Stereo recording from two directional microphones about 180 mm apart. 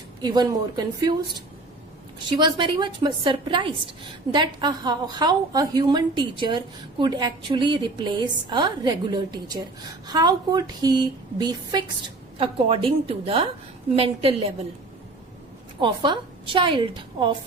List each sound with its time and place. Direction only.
0.2 s a woman's voice: 25° right (ahead or behind)
2.3 s a woman's voice: 25° right (ahead or behind)
15.8 s a woman's voice: 25° right (ahead or behind)